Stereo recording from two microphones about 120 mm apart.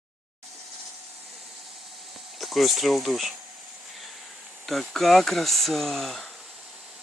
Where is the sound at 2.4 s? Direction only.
Centre (ahead or behind).